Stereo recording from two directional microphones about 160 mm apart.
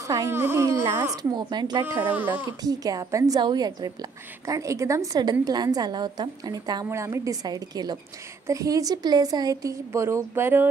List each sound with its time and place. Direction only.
0.0 s a woman's voice: 20° right (ahead or behind)
2.0 s speech: 10° right (ahead or behind)
2.6 s a woman's voice: 25° right (ahead or behind)